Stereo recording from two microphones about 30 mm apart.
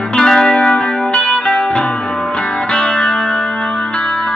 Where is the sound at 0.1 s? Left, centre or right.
Left.